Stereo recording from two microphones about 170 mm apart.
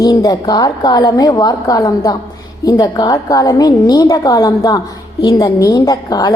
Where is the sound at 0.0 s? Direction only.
20° left (ahead or behind).